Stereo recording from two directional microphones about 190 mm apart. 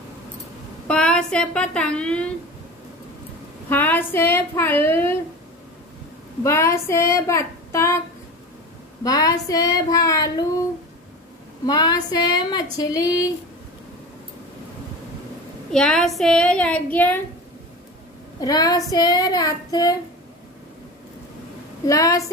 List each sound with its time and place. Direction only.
0.8 s speech: 5° left (ahead or behind)
3.6 s child singing: 10° left (ahead or behind)
6.4 s child singing: 15° left (ahead or behind)
9.0 s child singing: 20° left (ahead or behind)
11.6 s child singing: 20° left (ahead or behind)
15.7 s a sound: 5° left (ahead or behind)
18.4 s child singing: 20° left (ahead or behind)
21.8 s child singing: 15° left (ahead or behind)